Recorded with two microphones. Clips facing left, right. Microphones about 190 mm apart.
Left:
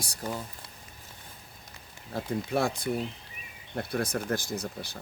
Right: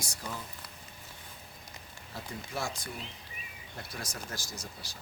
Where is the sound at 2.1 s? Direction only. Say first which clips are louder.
Left 10 dB; 60° left (ahead or behind).